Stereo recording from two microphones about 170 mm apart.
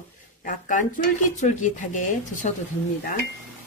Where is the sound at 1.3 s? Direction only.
45° left (ahead or behind).